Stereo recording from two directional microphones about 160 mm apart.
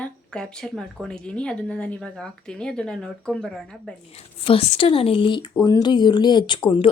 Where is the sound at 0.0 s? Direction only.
5° left (ahead or behind).